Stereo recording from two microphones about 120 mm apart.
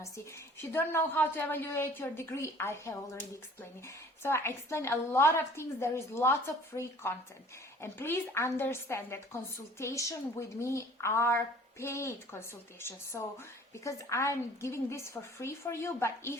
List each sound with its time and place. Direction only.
0.6 s a woman's voice: 20° left (ahead or behind)